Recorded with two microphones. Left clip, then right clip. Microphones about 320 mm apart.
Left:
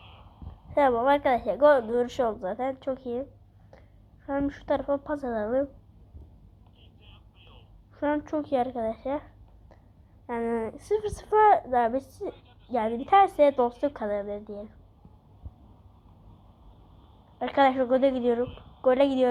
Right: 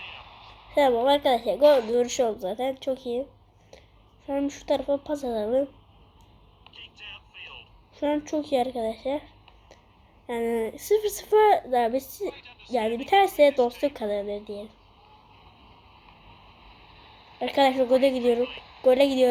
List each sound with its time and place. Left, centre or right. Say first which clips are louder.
0.7 s a woman's voice: right 1 dB; right
3.0 s speech: right 3 dB; centre
4.3 s speech: right 2 dB; right
7.1 s a sound: right 14 dB; right
8.3 s speech: right 2 dB; right
10.2 s a woman's voice: right 2 dB; right
17.4 s speech: right 1 dB; right
18.9 s speech: right 1 dB; right